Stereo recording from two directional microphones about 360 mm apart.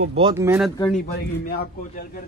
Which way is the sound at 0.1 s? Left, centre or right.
Centre.